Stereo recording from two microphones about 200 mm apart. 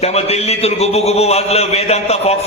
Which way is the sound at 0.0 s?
30° left (ahead or behind).